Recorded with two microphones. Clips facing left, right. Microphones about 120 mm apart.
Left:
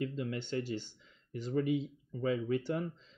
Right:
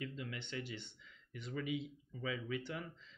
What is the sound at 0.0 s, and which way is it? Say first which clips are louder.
Speech: left 9 dB; 40° left (ahead or behind).